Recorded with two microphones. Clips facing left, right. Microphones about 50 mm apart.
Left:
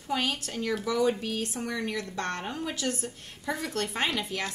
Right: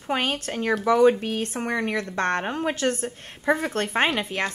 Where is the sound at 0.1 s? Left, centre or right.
Right.